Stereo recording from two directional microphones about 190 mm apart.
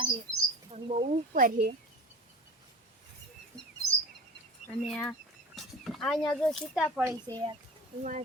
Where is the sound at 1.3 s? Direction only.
45° right (ahead or behind).